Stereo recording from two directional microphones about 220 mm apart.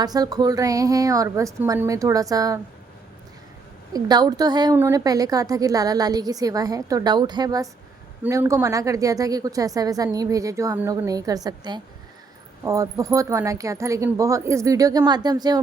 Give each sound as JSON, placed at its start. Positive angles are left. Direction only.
{"t": 0.0, "sound": "a woman's voice", "side_deg": -15}
{"t": 3.9, "sound": "a woman's voice", "side_deg": -20}